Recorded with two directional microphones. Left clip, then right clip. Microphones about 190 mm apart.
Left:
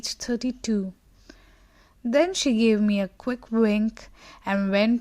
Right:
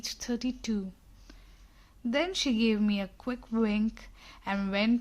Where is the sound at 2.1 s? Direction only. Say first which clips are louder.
Left 8 dB; 30° left (ahead or behind).